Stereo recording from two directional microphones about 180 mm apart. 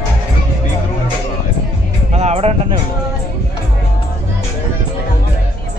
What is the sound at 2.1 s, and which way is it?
Music, 35° right (ahead or behind).